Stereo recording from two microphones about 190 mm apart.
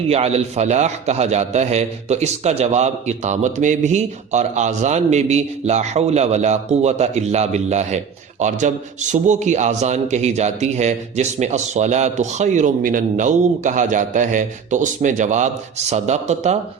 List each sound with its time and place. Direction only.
0.1 s a man's voice: 35° right (ahead or behind)